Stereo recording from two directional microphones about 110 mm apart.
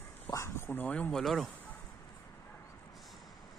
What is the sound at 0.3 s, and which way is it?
Speech, 25° left (ahead or behind).